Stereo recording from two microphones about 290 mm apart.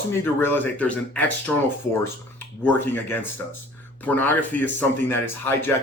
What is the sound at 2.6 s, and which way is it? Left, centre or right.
Speech, centre.